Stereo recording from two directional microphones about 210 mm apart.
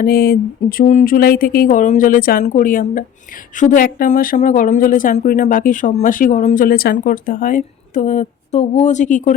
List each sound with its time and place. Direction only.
0.0 s speech: 45° left (ahead or behind)